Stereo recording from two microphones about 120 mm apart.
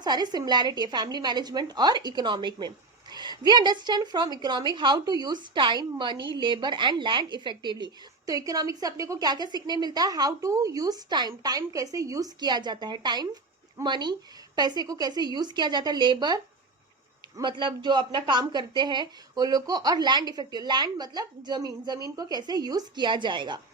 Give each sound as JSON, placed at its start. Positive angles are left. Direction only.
{"t": 0.0, "sound": "a woman's voice", "side_deg": -35}
{"t": 17.4, "sound": "a woman's voice", "side_deg": -40}